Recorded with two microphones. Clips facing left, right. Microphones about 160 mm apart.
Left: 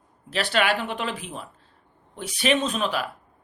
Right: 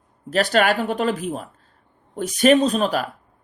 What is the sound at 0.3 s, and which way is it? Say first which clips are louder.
Speech: right 5 dB; 45° right (ahead or behind).